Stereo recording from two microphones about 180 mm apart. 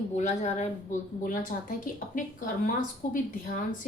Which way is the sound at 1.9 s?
50° left (ahead or behind).